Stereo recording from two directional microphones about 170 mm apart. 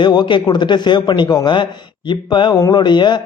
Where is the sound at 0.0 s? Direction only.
25° left (ahead or behind).